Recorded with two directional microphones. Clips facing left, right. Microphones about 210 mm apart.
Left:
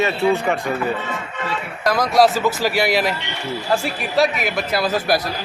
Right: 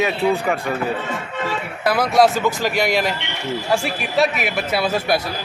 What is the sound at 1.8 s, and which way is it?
A man's voice, 5° right (ahead or behind).